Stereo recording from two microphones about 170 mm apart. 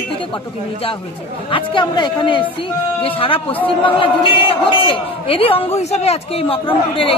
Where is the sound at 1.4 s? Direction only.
30° left (ahead or behind).